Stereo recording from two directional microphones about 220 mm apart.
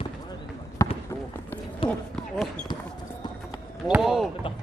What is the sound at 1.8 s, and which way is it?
Basketball bounce, 5° left (ahead or behind).